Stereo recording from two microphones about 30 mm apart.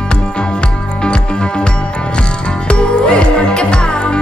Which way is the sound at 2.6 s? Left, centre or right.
Left.